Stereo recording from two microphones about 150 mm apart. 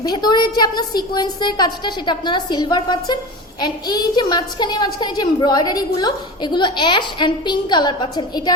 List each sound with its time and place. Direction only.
0.0 s a woman's voice: 30° left (ahead or behind)